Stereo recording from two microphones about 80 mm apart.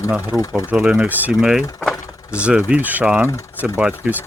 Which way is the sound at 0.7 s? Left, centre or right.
Centre.